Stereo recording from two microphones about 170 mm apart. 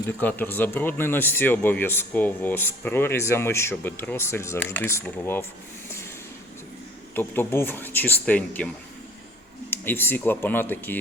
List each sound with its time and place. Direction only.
0.2 s speech: 10° left (ahead or behind)
7.2 s speech: 10° left (ahead or behind)